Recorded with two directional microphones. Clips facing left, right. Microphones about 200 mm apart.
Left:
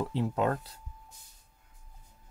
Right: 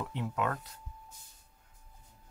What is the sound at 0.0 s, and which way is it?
Speech, 30° left (ahead or behind).